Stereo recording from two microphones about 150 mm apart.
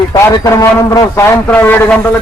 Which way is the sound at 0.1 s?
25° left (ahead or behind).